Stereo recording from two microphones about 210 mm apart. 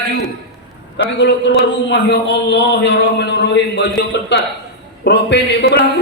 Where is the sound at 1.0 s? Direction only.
60° left (ahead or behind).